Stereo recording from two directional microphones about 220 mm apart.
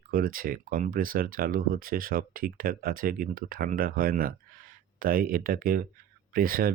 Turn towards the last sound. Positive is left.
turn(degrees=-40)  # may be behind; listen again after turning